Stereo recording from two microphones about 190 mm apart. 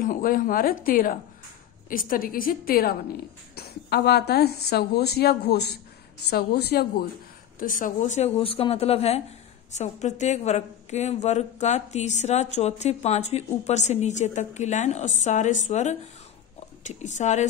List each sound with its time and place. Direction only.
0.0 s a woman's voice: 45° left (ahead or behind)
7.5 s a woman's voice: 45° left (ahead or behind)